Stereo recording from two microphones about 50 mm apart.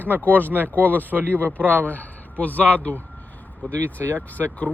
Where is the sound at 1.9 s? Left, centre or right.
Left.